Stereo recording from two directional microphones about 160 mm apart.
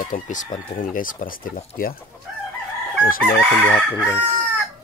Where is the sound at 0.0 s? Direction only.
55° left (ahead or behind).